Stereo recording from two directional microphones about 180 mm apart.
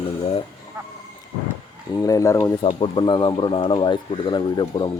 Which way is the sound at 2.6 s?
30° left (ahead or behind).